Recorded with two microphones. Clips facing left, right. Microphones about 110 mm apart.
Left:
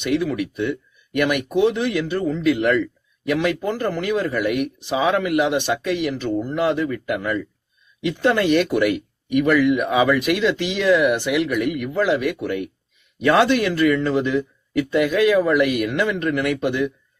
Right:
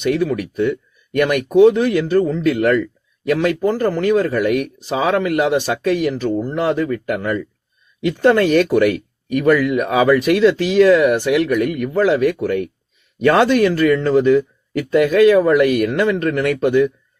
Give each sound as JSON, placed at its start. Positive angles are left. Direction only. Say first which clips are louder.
{"t": 0.0, "sound": "speech", "louder": "right 3 dB", "side_deg": -45}
{"t": 0.7, "sound": "a sound", "louder": "right 3 dB", "side_deg": -45}
{"t": 1.5, "sound": "a man's voice", "louder": "right 9 dB", "side_deg": -40}